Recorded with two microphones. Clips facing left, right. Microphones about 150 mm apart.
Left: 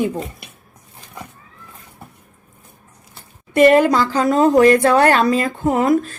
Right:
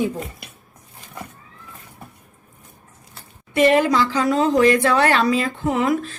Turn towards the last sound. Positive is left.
turn(degrees=45)  # may be behind; listen again after turning